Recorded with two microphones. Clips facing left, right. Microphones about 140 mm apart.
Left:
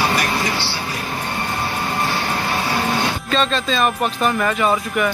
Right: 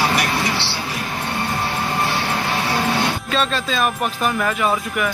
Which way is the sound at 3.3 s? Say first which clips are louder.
Left 4 dB; 5° right (ahead or behind).